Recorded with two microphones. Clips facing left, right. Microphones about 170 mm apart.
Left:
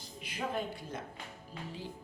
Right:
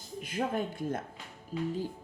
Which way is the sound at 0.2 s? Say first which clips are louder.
Right 5 dB; 45° right (ahead or behind).